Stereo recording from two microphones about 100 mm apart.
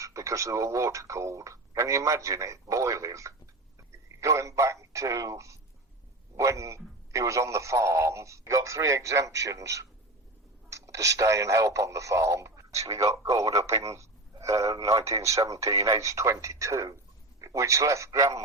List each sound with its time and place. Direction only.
0.0 s a man's voice: 30° right (ahead or behind)